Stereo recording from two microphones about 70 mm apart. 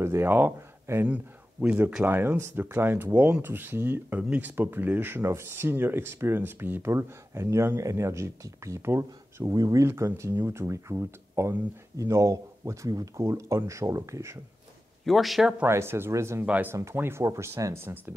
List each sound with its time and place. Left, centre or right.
0.0 s a sound: right
0.3 s speech: right
1.0 s speech: centre
2.0 s speech: right
4.2 s speech: centre
4.6 s speech: right
9.5 s speech: right
9.8 s speech: right
15.0 s speech: centre
15.6 s speech: right
17.2 s speech: right